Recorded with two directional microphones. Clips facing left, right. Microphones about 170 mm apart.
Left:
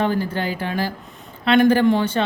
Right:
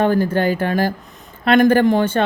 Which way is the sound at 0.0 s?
50° right (ahead or behind).